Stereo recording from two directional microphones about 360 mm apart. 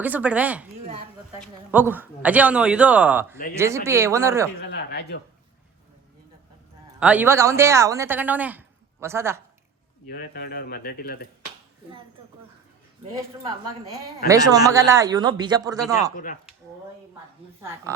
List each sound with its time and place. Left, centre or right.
0.0 s a man's voice: centre
4.6 s speech: left
7.0 s a woman's voice: centre
10.1 s speech: left
14.3 s a woman's voice: centre
16.1 s speech: left